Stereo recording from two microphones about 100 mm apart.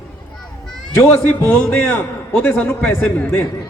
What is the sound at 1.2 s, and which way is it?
A man's voice, 15° left (ahead or behind).